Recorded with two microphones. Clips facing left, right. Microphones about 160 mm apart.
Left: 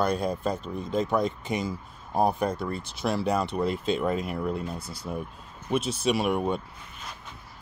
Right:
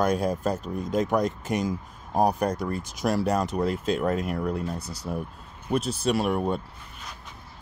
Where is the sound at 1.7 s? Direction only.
15° right (ahead or behind).